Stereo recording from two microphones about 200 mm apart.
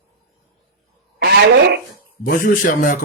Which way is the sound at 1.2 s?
55° right (ahead or behind).